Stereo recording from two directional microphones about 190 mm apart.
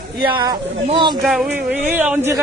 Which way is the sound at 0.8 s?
25° right (ahead or behind).